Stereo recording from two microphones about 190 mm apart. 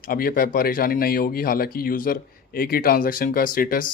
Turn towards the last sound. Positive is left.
turn(degrees=45)  # may be behind; listen again after turning